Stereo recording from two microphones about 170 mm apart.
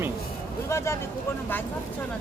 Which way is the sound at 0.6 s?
15° left (ahead or behind).